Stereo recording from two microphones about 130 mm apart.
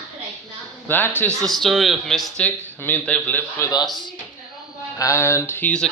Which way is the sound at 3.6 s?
25° left (ahead or behind).